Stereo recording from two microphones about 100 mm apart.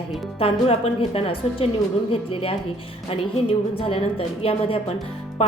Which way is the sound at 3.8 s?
70° left (ahead or behind).